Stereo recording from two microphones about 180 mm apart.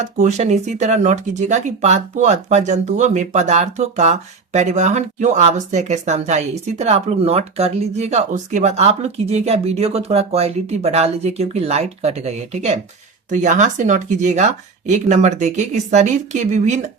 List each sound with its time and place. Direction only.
0.0 s speech: 40° right (ahead or behind)